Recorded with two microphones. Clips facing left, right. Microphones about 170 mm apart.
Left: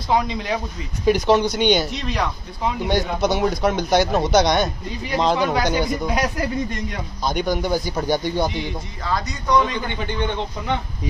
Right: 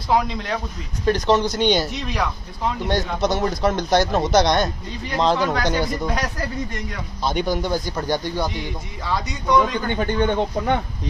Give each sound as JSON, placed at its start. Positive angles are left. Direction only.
{"t": 0.1, "sound": "speech", "side_deg": 0}
{"t": 5.7, "sound": "speech", "side_deg": 0}
{"t": 7.2, "sound": "speech", "side_deg": 0}
{"t": 9.9, "sound": "speech", "side_deg": -45}